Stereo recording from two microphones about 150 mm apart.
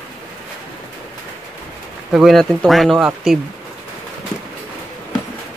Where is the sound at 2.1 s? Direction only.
Centre (ahead or behind).